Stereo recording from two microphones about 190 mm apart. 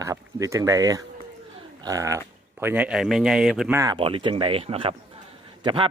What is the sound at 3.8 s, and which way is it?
A man's voice, 25° right (ahead or behind).